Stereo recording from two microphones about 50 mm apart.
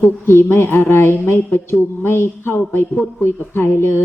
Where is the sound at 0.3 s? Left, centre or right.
Left.